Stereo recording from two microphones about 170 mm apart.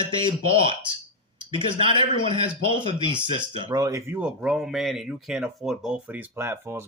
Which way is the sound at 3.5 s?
20° right (ahead or behind).